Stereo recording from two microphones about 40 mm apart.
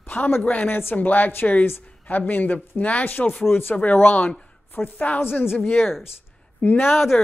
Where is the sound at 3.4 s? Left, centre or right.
Left.